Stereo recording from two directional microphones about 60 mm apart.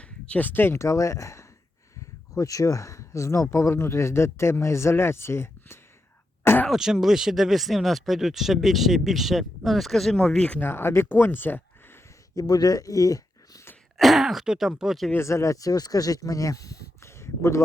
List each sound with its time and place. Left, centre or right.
0.0 s a sound: left
0.8 s speech: left
2.3 s speech: left
6.7 s speech: centre
10.6 s speech: left
12.3 s speech: left
13.9 s speech: centre
15.2 s speech: left